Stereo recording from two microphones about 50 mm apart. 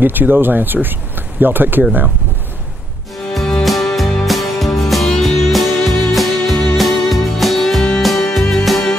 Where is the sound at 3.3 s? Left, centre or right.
Centre.